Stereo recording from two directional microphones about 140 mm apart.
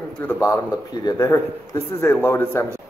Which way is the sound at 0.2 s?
20° left (ahead or behind).